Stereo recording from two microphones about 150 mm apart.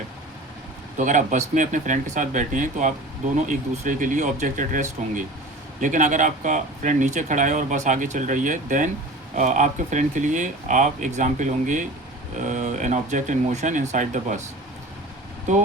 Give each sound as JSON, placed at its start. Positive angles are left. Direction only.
{"t": 0.9, "sound": "speech", "side_deg": -55}